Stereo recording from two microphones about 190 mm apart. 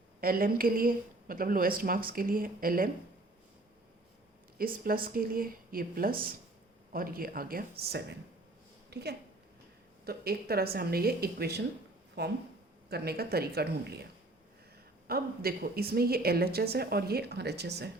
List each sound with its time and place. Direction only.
0.2 s a woman's voice: 50° right (ahead or behind)
4.5 s a woman's voice: 50° right (ahead or behind)